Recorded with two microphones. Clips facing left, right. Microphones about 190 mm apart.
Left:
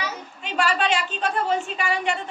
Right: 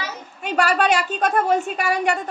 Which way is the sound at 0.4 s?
45° right (ahead or behind).